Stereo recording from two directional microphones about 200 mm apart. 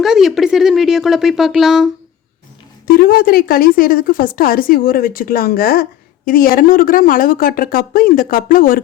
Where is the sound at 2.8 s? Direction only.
50° left (ahead or behind).